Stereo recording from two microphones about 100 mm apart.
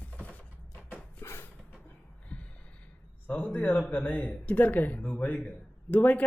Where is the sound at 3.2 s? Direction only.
15° left (ahead or behind).